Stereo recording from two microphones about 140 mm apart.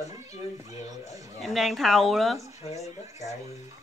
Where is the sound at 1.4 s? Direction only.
Centre (ahead or behind).